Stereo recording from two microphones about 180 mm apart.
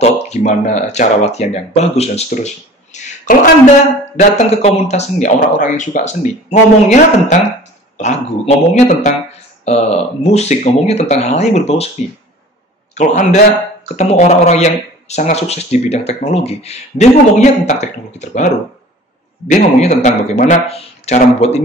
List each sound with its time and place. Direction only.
0.0 s speech: 40° left (ahead or behind)
12.9 s a man's voice: 40° left (ahead or behind)
19.5 s speech: 40° left (ahead or behind)